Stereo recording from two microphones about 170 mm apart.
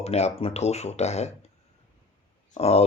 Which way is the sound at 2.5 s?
35° left (ahead or behind).